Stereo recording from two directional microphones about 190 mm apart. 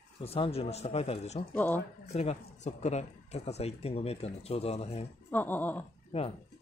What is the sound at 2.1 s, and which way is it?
Speech, 35° left (ahead or behind).